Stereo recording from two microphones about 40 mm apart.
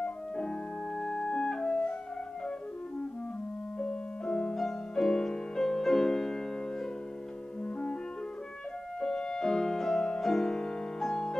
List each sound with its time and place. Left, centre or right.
0.0 s music: left
3.8 s music: left
4.6 s music: centre
7.6 s clarinet: left
9.0 s music: centre